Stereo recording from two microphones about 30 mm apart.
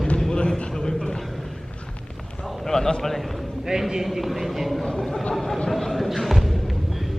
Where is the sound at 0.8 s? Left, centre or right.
Left.